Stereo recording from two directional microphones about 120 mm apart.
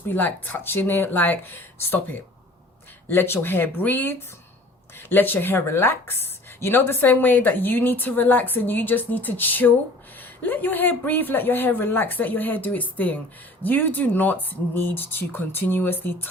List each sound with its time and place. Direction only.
0.1 s speech: 15° left (ahead or behind)